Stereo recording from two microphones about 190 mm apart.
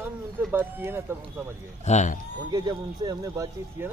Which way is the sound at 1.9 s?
40° left (ahead or behind).